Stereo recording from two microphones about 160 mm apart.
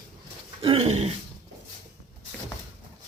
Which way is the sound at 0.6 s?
40° right (ahead or behind).